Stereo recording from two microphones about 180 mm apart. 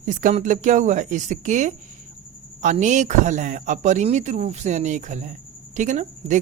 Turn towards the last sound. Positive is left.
turn(degrees=-45)  # may be behind; listen again after turning